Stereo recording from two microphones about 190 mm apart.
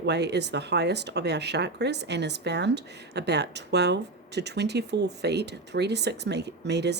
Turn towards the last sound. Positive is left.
turn(degrees=-60)  # may be behind; listen again after turning